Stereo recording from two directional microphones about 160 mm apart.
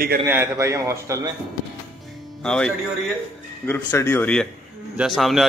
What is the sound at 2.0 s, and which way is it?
Music, 5° left (ahead or behind).